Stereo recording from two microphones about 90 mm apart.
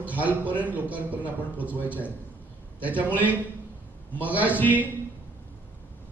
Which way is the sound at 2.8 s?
15° right (ahead or behind).